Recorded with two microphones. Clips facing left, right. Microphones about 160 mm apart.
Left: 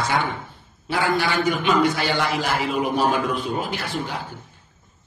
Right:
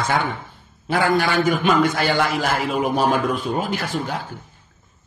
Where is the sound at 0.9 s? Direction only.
45° right (ahead or behind).